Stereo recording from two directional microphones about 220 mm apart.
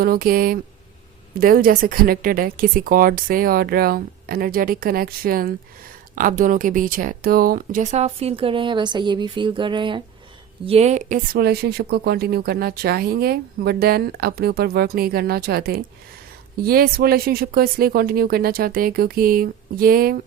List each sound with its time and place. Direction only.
0.0 s speech: 45° right (ahead or behind)